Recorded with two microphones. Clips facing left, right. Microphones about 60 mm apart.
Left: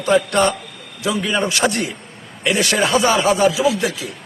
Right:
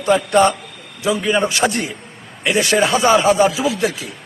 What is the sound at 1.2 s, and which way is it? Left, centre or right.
Speech, centre.